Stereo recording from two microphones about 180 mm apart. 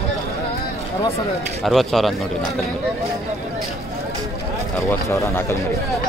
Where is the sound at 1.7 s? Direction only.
Centre (ahead or behind).